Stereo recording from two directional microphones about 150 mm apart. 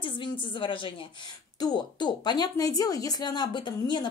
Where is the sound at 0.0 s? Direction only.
35° left (ahead or behind).